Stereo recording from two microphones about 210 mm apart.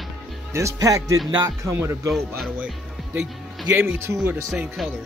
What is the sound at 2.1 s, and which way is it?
Speech, centre (ahead or behind).